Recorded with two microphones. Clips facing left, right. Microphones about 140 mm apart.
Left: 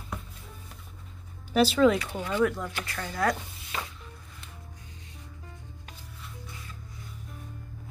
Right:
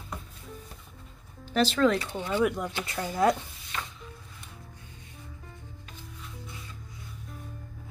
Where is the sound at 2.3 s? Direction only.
15° right (ahead or behind).